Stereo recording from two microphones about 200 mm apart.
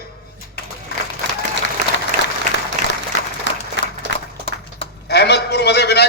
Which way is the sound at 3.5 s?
65° left (ahead or behind).